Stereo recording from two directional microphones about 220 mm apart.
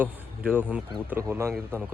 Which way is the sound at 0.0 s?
5° right (ahead or behind).